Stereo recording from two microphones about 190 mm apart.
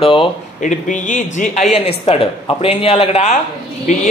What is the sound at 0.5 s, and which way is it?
Speech, 40° left (ahead or behind).